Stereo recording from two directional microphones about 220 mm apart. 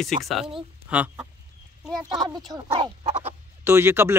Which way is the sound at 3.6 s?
10° right (ahead or behind).